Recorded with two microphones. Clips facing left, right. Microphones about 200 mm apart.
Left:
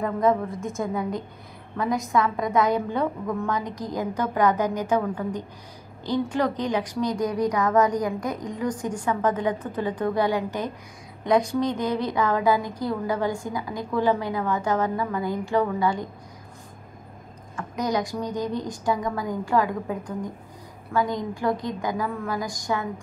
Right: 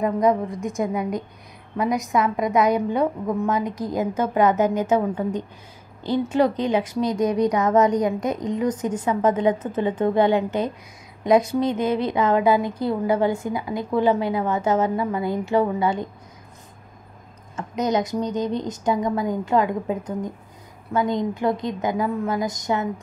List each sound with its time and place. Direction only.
0.0 s a woman's voice: 20° right (ahead or behind)
17.6 s a woman's voice: 20° right (ahead or behind)